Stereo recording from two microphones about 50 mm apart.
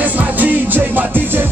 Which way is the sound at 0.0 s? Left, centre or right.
Right.